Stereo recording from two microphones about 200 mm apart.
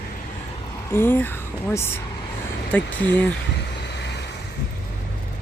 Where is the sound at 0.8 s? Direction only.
10° left (ahead or behind).